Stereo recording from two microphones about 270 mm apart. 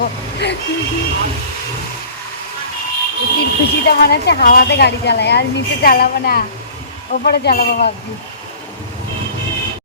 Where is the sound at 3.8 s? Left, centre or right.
Left.